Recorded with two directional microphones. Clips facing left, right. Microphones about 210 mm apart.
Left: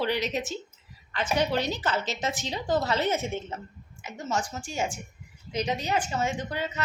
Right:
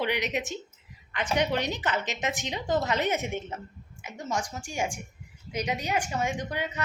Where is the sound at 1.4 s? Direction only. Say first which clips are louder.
Left 1 dB; 15° right (ahead or behind).